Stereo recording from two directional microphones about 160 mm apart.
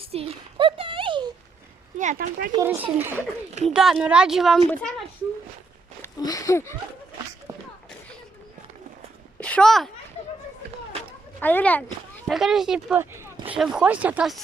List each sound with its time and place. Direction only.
0.0 s a sound: 35° right (ahead or behind)
2.0 s speech: 50° right (ahead or behind)
2.6 s speech: 10° right (ahead or behind); by 5.0 s 5° left (ahead or behind)
6.0 s speech: 20° left (ahead or behind)
7.5 s a sound: 15° right (ahead or behind)
9.4 s speech: 5° left (ahead or behind)
11.3 s speech: 10° left (ahead or behind)
12.3 s speech: centre (ahead or behind)